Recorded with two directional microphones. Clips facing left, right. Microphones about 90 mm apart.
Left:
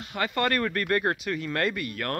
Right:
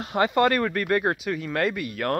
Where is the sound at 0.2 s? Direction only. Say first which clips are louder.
Right 5 dB; 20° right (ahead or behind).